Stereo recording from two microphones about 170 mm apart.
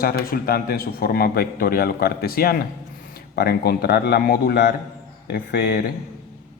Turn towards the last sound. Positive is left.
turn(degrees=65)  # may be behind; listen again after turning